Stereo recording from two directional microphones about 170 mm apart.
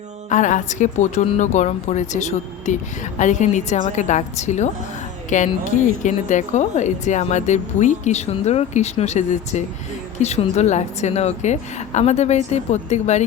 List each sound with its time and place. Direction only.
0.3 s a woman's voice: 45° left (ahead or behind)